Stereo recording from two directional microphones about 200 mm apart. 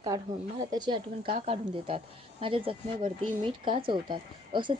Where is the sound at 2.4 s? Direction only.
25° right (ahead or behind).